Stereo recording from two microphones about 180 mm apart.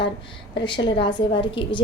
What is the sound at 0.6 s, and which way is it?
A woman's voice, 25° left (ahead or behind).